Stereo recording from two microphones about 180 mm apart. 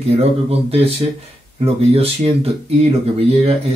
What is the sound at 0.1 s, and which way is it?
Speech, 35° right (ahead or behind).